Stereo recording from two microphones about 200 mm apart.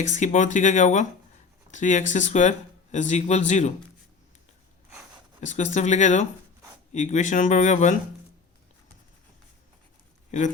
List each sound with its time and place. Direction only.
0.1 s speech: 40° left (ahead or behind)
5.4 s speech: 35° left (ahead or behind)